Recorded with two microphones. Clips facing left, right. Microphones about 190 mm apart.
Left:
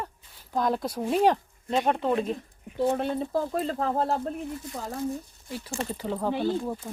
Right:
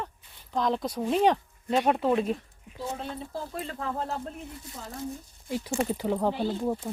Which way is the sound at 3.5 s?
35° left (ahead or behind).